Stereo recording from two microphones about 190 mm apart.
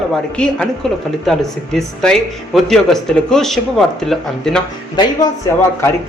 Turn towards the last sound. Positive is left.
turn(degrees=15)  # may be behind; listen again after turning